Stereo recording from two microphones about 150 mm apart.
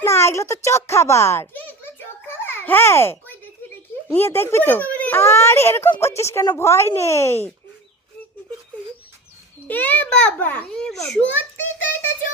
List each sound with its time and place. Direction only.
0.0 s a sound: 15° left (ahead or behind)
4.1 s a child's voice: 15° left (ahead or behind)
9.6 s a child's voice: 10° left (ahead or behind)